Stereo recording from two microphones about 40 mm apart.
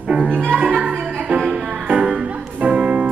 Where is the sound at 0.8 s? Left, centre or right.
Right.